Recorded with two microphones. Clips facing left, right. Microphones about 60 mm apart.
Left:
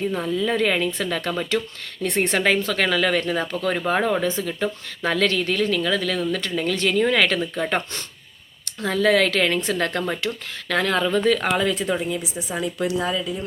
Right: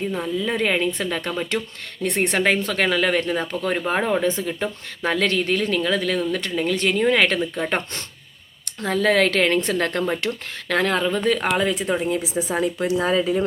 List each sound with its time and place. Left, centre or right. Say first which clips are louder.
0.2 s speech: left 1 dB; centre
1.5 s speech: left 2 dB; centre
2.0 s speech: even; right
8.8 s a woman's voice: even; right
11.0 s speech: left 1 dB; centre
12.0 s a woman's voice: right 4 dB; right
12.8 s speech: left 2 dB; right
13.1 s a woman's voice: right 6 dB; right